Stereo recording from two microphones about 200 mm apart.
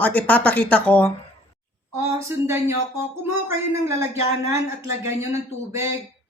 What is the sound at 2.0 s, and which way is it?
A woman's voice, 15° right (ahead or behind).